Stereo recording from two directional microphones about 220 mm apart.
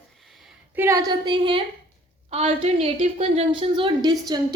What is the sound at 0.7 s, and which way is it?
A woman's voice, 10° right (ahead or behind).